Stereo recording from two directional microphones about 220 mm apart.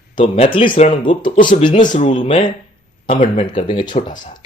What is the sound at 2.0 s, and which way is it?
Speech, 25° left (ahead or behind).